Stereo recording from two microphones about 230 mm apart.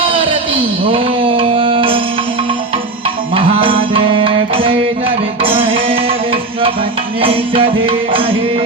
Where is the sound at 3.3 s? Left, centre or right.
Right.